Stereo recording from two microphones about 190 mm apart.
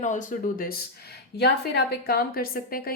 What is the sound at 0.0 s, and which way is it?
Speech, 40° left (ahead or behind).